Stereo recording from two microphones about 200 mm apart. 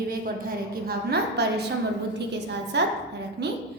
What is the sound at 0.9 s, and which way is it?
Speech, 55° right (ahead or behind).